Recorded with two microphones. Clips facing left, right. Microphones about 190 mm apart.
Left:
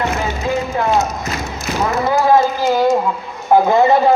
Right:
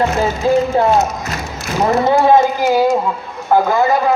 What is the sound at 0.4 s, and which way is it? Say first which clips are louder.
Speech: right 7 dB; 35° right (ahead or behind).